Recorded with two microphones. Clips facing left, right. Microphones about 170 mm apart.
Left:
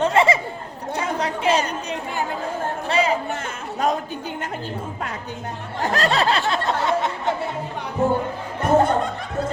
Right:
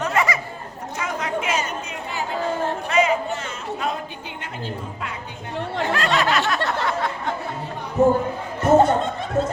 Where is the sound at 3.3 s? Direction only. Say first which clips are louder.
Even; 40° left (ahead or behind).